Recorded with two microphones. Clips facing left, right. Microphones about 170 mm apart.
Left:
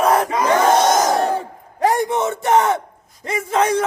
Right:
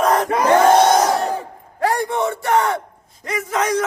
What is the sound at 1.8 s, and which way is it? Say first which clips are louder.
A man's voice: left 2 dB; 20° left (ahead or behind).